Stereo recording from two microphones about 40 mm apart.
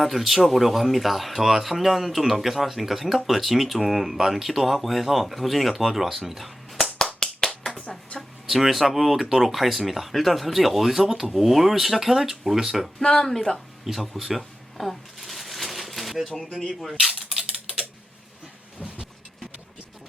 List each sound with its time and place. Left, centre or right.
0.0 s speech: centre
7.2 s a sound: centre
7.7 s finger snapping: left
8.4 s speech: centre
13.0 s speech: left
13.2 s a woman's voice: centre
13.8 s shuffling cards: centre
16.3 s speech: centre
17.3 s typing: right